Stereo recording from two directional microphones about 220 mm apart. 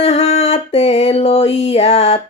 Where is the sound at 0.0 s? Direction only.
30° left (ahead or behind).